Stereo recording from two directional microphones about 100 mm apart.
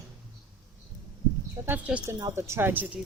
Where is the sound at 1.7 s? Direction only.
15° right (ahead or behind).